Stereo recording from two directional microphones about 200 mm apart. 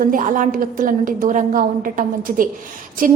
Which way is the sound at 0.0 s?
45° right (ahead or behind).